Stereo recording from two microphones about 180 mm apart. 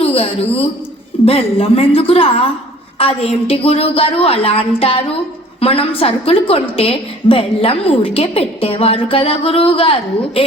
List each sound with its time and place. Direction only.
0.0 s a woman's voice: 30° left (ahead or behind)